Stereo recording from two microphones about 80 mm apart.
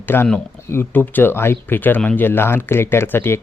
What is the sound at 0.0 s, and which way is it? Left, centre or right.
Speech, left.